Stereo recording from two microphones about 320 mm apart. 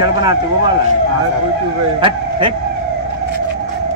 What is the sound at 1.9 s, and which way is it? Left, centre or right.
Speech, centre.